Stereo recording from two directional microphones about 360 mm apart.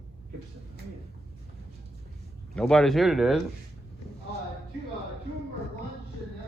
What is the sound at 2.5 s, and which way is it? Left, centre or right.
Speech, centre.